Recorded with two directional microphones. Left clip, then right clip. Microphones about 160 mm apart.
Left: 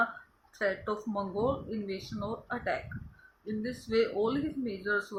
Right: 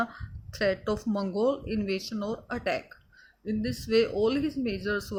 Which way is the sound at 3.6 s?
75° right (ahead or behind).